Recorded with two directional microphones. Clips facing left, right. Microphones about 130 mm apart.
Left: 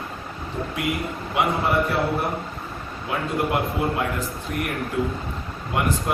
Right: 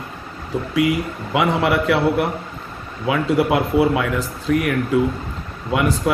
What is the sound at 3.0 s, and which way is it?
Speech, 90° right.